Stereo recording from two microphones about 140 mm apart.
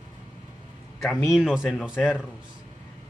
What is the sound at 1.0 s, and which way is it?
Speech, 5° right (ahead or behind).